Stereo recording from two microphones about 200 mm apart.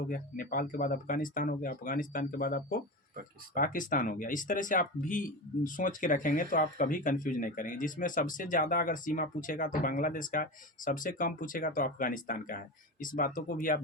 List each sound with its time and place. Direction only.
0.1 s speech: 45° left (ahead or behind)